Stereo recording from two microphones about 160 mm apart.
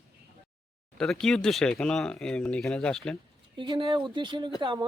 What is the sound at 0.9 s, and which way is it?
Speech, 5° left (ahead or behind).